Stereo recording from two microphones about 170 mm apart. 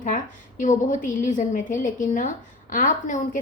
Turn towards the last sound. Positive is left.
turn(degrees=50)  # may be behind; listen again after turning